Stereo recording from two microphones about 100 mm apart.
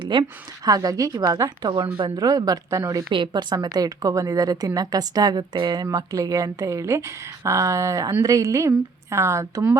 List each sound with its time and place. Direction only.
0.1 s a woman's voice: 45° right (ahead or behind)
2.1 s a woman's voice: 35° right (ahead or behind)
3.1 s a woman's voice: 60° right (ahead or behind)
3.5 s a woman's voice: 40° right (ahead or behind)